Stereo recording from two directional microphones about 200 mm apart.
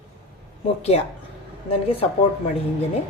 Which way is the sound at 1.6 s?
30° left (ahead or behind).